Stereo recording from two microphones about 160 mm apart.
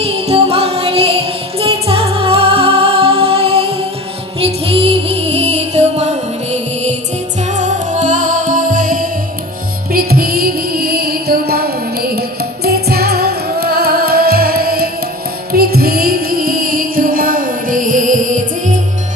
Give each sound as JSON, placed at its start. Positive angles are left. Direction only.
{"t": 0.0, "sound": "music", "side_deg": -40}
{"t": 9.9, "sound": "music", "side_deg": -70}